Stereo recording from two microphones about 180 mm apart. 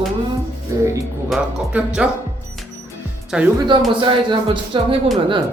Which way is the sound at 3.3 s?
5° right (ahead or behind).